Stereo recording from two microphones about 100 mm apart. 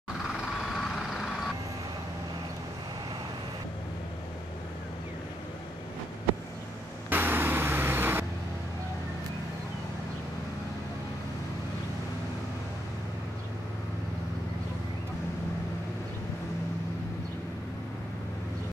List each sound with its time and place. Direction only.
0.7 s vehicle: centre (ahead or behind)
7.1 s vehicle: 20° right (ahead or behind)